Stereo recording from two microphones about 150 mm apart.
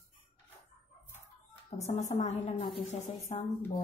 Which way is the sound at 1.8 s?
50° left (ahead or behind).